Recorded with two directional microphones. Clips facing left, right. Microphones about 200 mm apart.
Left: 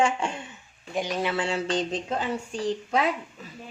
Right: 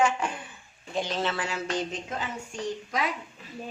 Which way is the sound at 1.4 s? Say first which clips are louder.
Left 4 dB; 30° left (ahead or behind).